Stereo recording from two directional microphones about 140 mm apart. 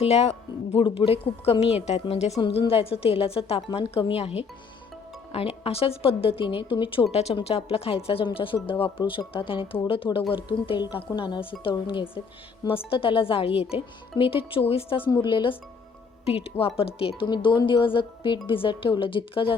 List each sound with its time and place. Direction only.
0.0 s a woman's voice: 50° left (ahead or behind)
16.2 s speech: 45° left (ahead or behind)